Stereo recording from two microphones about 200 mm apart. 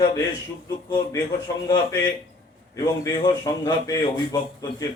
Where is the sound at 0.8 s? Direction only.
20° left (ahead or behind).